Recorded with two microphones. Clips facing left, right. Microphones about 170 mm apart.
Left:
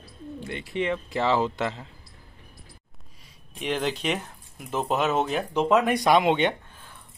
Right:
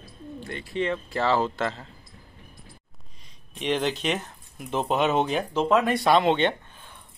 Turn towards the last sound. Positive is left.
turn(degrees=10)  # may be behind; listen again after turning